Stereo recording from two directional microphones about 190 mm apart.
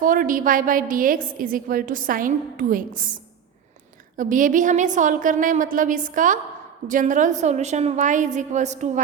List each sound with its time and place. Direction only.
0.0 s a woman's voice: 45° right (ahead or behind)
4.2 s a woman's voice: 45° right (ahead or behind)